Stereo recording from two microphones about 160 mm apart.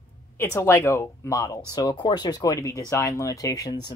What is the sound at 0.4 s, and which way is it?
Speech, 15° left (ahead or behind).